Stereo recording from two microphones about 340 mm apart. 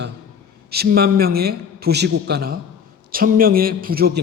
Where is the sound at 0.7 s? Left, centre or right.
Right.